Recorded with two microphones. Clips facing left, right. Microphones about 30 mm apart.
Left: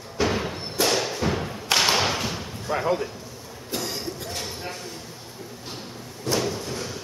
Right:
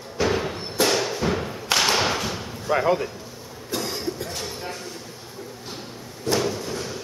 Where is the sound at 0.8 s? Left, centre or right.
Centre.